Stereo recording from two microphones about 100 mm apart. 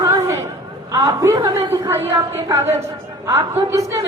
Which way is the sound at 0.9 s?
30° right (ahead or behind).